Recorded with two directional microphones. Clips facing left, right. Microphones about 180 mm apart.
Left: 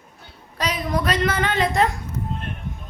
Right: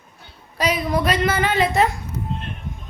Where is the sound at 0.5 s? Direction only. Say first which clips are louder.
Right 3 dB; 10° right (ahead or behind).